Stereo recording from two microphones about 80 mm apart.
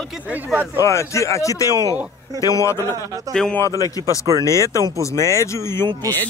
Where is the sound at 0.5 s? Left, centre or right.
Right.